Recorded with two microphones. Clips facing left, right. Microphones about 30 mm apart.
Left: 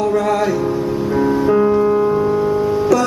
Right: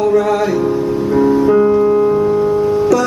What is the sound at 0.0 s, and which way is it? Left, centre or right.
Music, centre.